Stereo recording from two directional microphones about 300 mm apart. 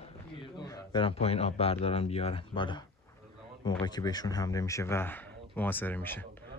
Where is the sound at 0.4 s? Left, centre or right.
Centre.